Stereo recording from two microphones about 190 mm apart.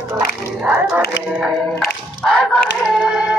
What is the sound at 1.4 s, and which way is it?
Chicken, centre (ahead or behind).